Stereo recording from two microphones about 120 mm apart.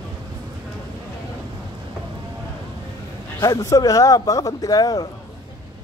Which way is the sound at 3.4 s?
30° left (ahead or behind).